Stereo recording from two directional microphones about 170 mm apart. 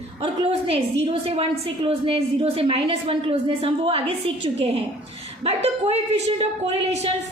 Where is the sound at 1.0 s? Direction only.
30° right (ahead or behind).